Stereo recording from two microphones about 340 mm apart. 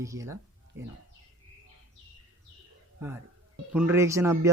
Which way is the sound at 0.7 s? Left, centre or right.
Right.